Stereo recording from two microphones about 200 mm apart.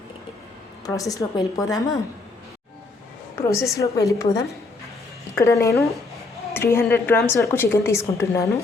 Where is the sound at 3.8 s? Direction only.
15° left (ahead or behind).